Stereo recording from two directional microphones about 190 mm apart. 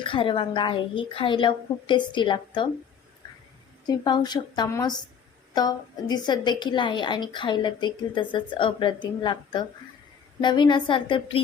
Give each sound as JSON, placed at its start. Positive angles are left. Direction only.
{"t": 0.0, "sound": "a woman's voice", "side_deg": 25}
{"t": 3.8, "sound": "a woman's voice", "side_deg": 20}